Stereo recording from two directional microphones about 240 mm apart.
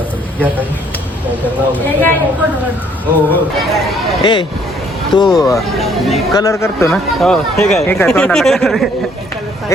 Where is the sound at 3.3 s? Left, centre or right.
Centre.